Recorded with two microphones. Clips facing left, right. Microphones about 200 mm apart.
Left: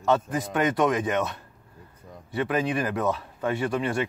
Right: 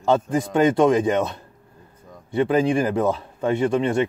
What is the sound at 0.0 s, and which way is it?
Speech, 25° right (ahead or behind).